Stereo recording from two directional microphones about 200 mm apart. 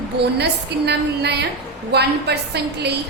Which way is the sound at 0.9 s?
55° right (ahead or behind).